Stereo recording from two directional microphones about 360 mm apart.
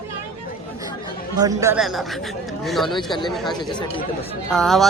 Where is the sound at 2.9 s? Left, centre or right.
Centre.